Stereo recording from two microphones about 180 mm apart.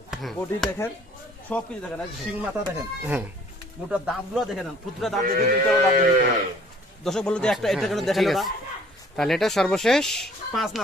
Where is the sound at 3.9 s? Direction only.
Centre (ahead or behind).